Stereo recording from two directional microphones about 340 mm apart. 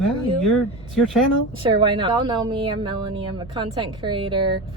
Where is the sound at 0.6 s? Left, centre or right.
Centre.